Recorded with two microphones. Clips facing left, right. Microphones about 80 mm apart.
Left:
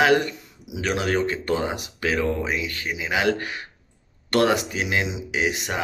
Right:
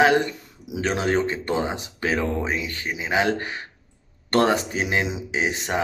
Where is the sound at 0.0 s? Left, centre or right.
Right.